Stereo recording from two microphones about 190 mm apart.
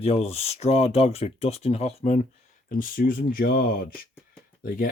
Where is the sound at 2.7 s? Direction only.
50° left (ahead or behind).